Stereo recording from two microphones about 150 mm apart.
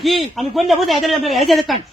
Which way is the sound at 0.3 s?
Centre (ahead or behind).